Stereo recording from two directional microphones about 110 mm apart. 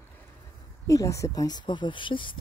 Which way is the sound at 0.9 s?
30° left (ahead or behind).